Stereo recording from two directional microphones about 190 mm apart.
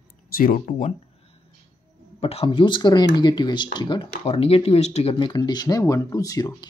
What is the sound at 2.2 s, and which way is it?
Speech, 30° left (ahead or behind).